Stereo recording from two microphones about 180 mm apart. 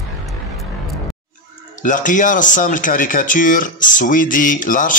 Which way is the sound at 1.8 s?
45° left (ahead or behind).